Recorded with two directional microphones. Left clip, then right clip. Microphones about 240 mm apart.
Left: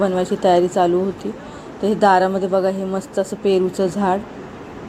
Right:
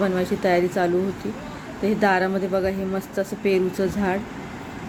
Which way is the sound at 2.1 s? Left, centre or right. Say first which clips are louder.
Left 6 dB; centre.